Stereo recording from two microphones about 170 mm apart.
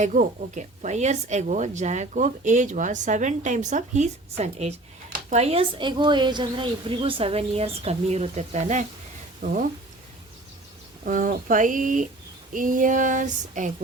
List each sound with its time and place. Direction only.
0.0 s a woman's voice: 45° right (ahead or behind)
11.0 s speech: 50° right (ahead or behind)